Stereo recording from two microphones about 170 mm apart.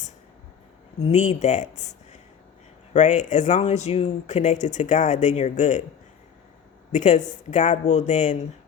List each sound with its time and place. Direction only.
1.0 s speech: 40° left (ahead or behind)
2.9 s speech: 45° left (ahead or behind)
6.9 s speech: 45° left (ahead or behind)